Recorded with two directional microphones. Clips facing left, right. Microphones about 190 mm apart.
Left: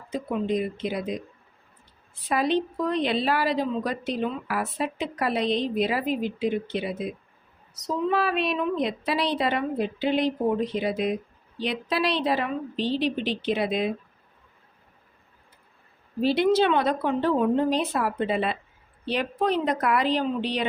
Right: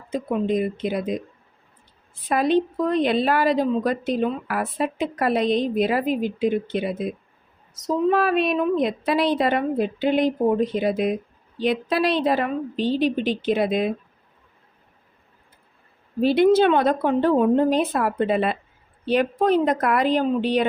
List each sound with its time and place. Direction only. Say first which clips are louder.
0.1 s a woman's voice: right 4 dB; 50° right (ahead or behind)
2.3 s a woman's voice: right 4 dB; 50° right (ahead or behind)
8.1 s a woman's voice: right 3 dB; 45° right (ahead or behind)
16.2 s a woman's voice: right 5 dB; 50° right (ahead or behind)